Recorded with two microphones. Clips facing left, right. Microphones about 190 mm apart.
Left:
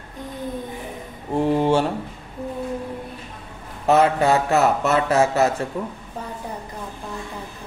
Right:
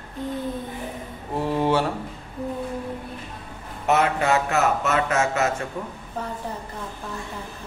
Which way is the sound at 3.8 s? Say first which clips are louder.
Left 4 dB; 35° left (ahead or behind).